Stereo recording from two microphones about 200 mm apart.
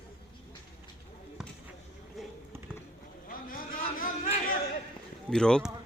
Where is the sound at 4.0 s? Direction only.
40° left (ahead or behind).